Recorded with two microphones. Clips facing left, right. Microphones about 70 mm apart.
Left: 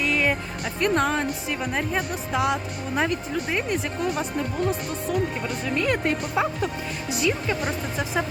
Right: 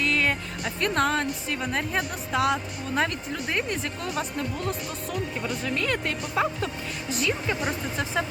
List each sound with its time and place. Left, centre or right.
0.0 s speech: centre
7.1 s speech: centre